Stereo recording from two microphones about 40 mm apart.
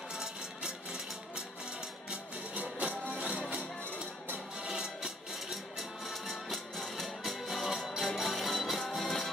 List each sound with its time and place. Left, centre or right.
0.1 s music: centre
3.1 s music: right
4.6 s music: centre